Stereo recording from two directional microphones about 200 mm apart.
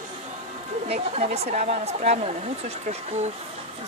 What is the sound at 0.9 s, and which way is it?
Speech, 30° right (ahead or behind).